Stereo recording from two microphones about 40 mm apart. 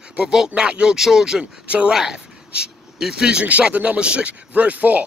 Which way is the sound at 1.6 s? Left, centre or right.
Right.